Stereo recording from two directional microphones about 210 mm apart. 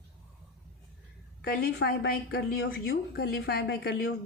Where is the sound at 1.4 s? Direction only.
45° left (ahead or behind).